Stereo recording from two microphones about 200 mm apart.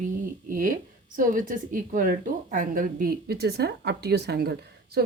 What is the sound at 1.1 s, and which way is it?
A woman's voice, 40° right (ahead or behind).